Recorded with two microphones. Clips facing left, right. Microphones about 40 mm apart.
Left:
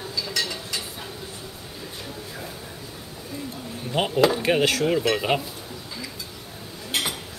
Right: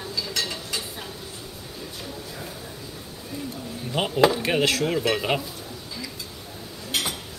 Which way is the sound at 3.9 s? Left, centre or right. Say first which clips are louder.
Even; centre.